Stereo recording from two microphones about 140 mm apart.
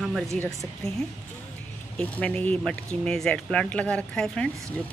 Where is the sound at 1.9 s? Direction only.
10° left (ahead or behind).